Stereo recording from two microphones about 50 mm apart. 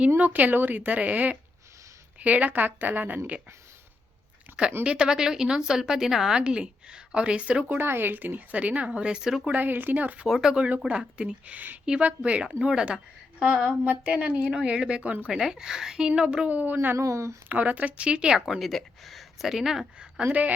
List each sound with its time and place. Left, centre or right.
0.3 s speech: right
4.8 s a woman's voice: centre
6.4 s speech: centre
7.8 s speech: right; by 9.3 s centre
9.5 s speech: right
10.2 s speech: centre
10.5 s speech: right
13.7 s speech: right
15.3 s a woman's voice: centre
16.5 s speech: right
17.0 s a woman's voice: right
17.5 s speech: right
18.3 s speech: centre
20.2 s speech: right